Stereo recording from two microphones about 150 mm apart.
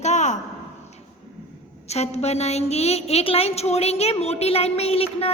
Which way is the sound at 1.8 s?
45° left (ahead or behind).